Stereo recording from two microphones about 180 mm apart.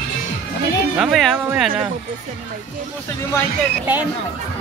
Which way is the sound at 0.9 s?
Centre (ahead or behind).